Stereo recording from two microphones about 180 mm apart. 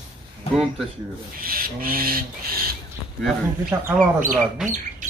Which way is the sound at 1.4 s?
55° right (ahead or behind).